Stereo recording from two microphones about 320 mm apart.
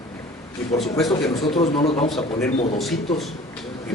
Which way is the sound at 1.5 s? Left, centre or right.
Centre.